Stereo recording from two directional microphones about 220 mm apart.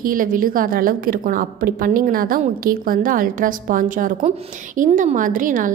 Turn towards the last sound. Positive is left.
turn(degrees=-35)  # may be behind; listen again after turning